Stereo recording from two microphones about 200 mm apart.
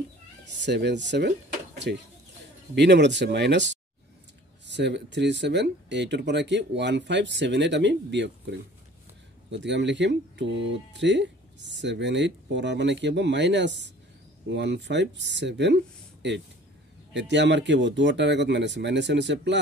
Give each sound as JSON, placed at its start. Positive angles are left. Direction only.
{"t": 0.6, "sound": "speech", "side_deg": -60}